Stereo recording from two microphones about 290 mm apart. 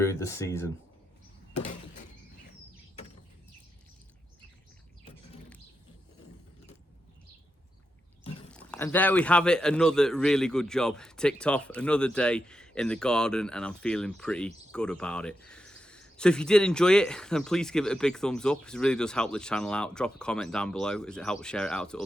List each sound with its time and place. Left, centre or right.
0.0 s speech: centre
8.4 s speech: centre